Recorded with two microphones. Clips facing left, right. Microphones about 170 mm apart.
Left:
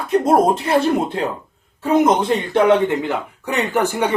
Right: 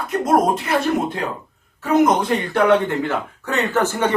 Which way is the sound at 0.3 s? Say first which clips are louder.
Left 1 dB; 30° left (ahead or behind).